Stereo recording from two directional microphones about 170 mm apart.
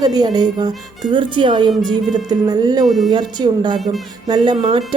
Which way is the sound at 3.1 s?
25° right (ahead or behind).